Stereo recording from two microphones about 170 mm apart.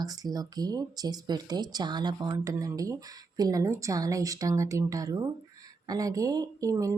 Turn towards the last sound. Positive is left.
turn(degrees=-20)  # may be behind; listen again after turning